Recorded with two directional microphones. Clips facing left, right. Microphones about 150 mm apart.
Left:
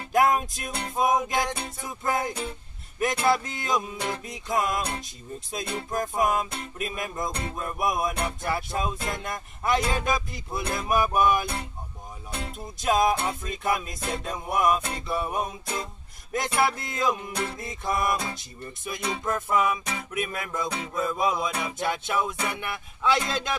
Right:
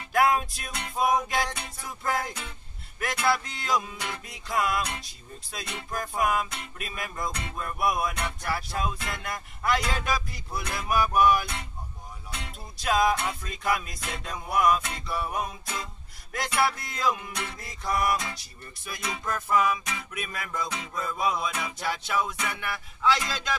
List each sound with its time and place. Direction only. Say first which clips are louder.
0.5 s music: left 4 dB; 30° left (ahead or behind)